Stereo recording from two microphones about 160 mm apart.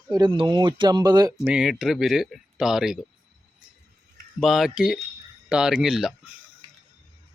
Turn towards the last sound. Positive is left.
turn(degrees=-5)  # may be behind; listen again after turning